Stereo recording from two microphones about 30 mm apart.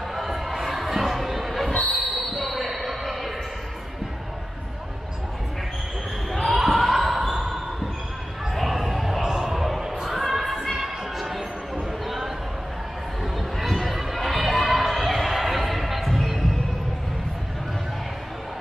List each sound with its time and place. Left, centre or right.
0.1 s crowd: centre
0.7 s a sound: centre
1.7 s train: left
2.3 s basketball bounce: centre
6.4 s basketball bounce: centre
8.5 s a sound: centre
10.0 s crowd: centre
13.2 s crowd: centre